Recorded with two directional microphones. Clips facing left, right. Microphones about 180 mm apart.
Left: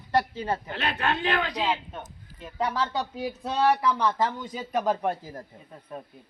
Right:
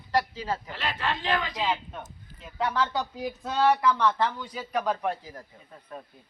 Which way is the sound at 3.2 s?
10° left (ahead or behind).